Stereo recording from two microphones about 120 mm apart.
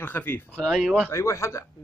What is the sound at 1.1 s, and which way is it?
Speech, 25° left (ahead or behind).